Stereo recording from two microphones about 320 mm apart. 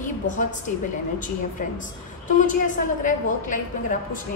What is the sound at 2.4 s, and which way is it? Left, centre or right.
A woman's voice, left.